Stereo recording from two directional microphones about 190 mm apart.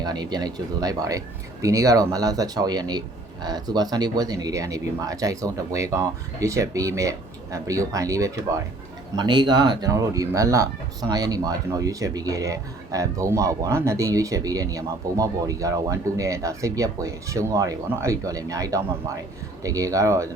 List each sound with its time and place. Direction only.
0.0 s speech: 20° right (ahead or behind)